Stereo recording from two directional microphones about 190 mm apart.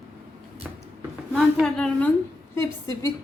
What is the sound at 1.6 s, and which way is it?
Speech, 5° left (ahead or behind).